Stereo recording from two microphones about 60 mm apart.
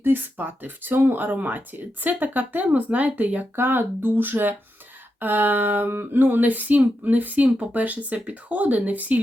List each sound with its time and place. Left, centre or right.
0.0 s speech: right
3.5 s speech: right